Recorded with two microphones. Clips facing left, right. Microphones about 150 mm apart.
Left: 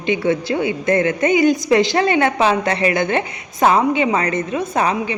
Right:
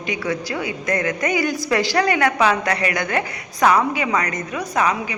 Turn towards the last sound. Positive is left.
turn(degrees=30)  # may be behind; listen again after turning